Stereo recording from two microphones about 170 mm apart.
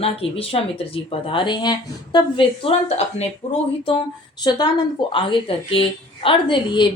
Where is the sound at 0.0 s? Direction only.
35° left (ahead or behind).